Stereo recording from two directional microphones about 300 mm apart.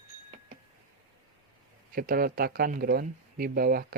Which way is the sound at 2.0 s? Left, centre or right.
Right.